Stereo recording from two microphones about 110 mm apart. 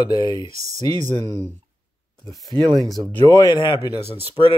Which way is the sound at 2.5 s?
40° right (ahead or behind).